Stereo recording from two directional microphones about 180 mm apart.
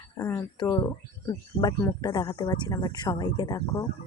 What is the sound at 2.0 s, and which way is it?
Speech, 20° left (ahead or behind).